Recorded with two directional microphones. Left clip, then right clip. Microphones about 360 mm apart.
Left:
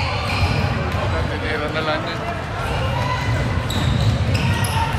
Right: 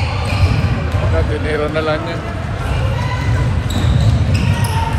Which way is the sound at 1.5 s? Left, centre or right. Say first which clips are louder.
Right 5 dB; centre.